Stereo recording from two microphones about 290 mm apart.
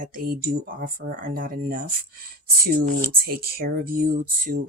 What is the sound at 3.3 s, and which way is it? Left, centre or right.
Speech, right.